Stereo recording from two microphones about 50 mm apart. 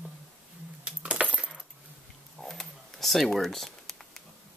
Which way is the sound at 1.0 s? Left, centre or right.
Right.